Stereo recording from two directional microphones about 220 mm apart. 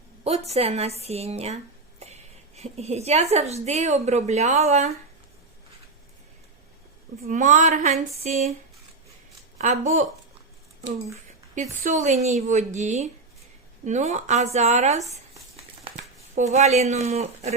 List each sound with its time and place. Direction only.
0.3 s speech: 30° right (ahead or behind)
2.6 s speech: 30° right (ahead or behind)
7.3 s a woman's voice: 35° right (ahead or behind)
9.6 s speech: 30° right (ahead or behind)
11.5 s a woman's voice: 30° right (ahead or behind)
16.3 s speech: 30° right (ahead or behind)